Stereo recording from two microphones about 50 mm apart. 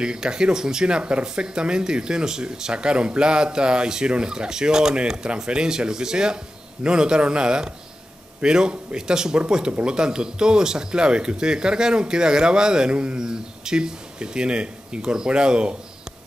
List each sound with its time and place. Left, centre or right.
0.0 s speech: centre